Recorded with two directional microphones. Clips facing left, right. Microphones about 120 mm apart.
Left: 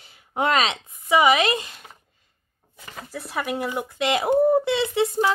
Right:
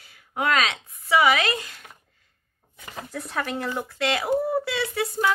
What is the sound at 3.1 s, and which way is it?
Speech, 5° left (ahead or behind).